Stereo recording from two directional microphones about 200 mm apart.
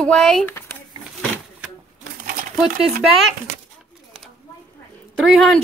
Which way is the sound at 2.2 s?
45° right (ahead or behind).